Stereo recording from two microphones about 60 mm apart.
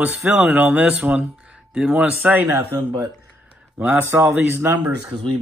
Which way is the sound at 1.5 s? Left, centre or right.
Centre.